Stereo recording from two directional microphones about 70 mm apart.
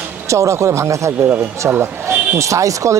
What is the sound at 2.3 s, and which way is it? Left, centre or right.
Speech, right.